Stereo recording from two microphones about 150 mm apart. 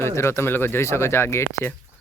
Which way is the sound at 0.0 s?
15° left (ahead or behind).